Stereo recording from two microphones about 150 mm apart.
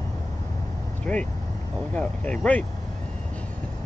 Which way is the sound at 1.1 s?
10° left (ahead or behind).